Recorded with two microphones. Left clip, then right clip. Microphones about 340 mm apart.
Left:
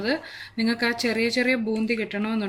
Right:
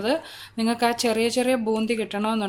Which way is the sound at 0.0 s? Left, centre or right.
Centre.